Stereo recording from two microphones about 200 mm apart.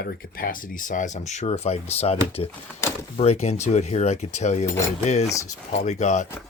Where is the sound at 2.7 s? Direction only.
15° left (ahead or behind).